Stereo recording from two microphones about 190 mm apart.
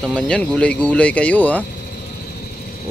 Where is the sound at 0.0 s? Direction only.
5° left (ahead or behind).